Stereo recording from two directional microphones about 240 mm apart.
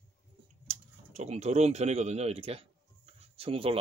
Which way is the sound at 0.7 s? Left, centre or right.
Right.